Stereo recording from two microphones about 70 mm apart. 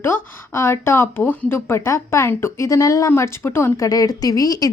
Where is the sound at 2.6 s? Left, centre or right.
Left.